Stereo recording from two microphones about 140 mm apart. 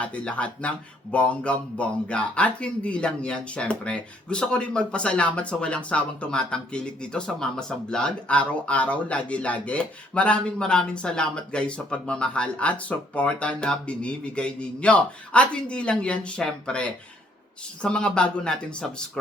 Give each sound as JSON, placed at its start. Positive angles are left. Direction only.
{"t": 0.0, "sound": "speech", "side_deg": 10}